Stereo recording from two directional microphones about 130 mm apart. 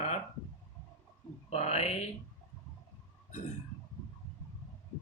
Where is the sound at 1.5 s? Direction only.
55° left (ahead or behind).